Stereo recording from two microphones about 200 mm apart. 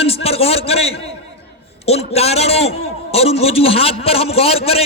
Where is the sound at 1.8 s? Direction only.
30° left (ahead or behind).